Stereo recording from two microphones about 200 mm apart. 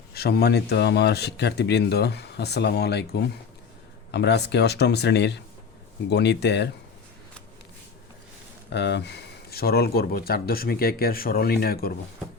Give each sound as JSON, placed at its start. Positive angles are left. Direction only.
{"t": 0.1, "sound": "speech", "side_deg": 50}
{"t": 8.7, "sound": "speech", "side_deg": 60}